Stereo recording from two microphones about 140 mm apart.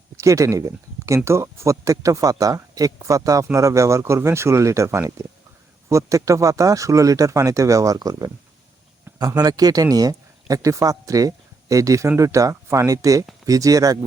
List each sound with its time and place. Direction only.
0.2 s speech: 20° right (ahead or behind)